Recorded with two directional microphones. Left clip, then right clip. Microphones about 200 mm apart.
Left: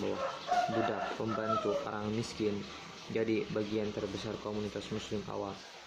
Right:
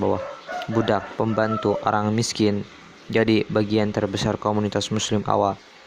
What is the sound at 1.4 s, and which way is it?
Speech, 45° right (ahead or behind).